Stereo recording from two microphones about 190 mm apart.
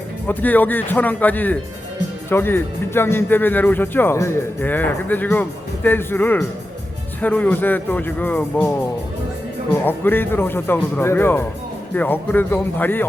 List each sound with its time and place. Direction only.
0.3 s speech: 10° left (ahead or behind)
9.7 s speech: 10° left (ahead or behind)